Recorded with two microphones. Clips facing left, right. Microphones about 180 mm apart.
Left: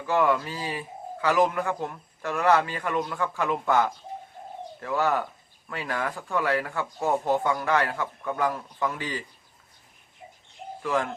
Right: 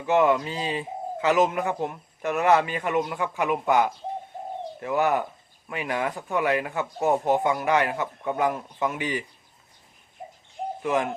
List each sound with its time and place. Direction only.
0.0 s speech: 20° right (ahead or behind)
10.2 s bird: 45° right (ahead or behind)
10.8 s speech: 20° right (ahead or behind)